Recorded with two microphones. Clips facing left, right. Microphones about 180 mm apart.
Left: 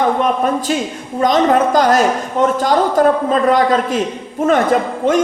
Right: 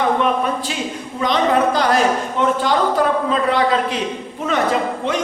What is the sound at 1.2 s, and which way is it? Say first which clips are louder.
A man's voice: left 4 dB; 45° left (ahead or behind).